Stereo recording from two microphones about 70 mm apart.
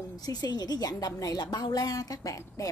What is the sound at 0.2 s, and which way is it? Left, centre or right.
A woman's voice, left.